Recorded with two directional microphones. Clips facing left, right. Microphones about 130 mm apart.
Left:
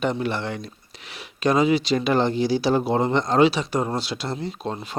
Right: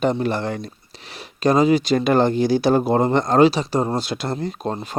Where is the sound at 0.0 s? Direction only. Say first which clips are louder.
Right 4 dB; 40° right (ahead or behind).